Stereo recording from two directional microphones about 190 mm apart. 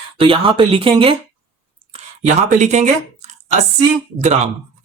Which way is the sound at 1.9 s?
40° right (ahead or behind).